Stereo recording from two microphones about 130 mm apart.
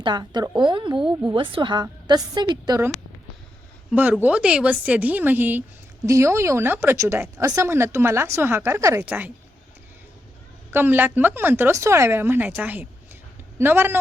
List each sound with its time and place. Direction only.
0.0 s a woman's voice: 35° right (ahead or behind)
3.9 s a woman's voice: 10° right (ahead or behind)
10.7 s speech: 15° right (ahead or behind)